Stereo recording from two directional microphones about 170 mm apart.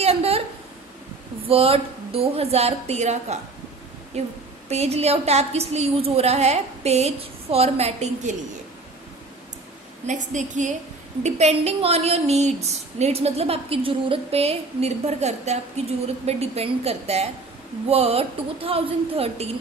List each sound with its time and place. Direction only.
0.0 s a sound: 35° right (ahead or behind)
1.5 s a woman's voice: 35° right (ahead or behind)
10.1 s a woman's voice: 45° right (ahead or behind)